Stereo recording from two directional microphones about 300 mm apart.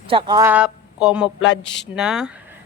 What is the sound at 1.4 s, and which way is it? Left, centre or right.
Speech, left.